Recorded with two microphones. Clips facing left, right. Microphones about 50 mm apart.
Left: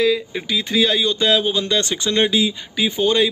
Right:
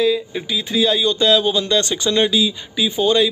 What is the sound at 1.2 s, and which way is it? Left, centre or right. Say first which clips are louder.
Speech: right 4 dB; left.